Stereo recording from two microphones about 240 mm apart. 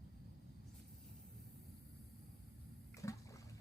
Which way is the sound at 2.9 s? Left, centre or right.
Centre.